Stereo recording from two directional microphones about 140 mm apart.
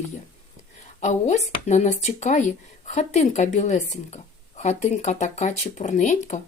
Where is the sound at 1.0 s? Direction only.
55° left (ahead or behind).